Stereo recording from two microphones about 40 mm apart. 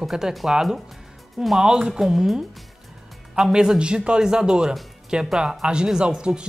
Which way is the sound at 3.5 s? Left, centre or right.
Right.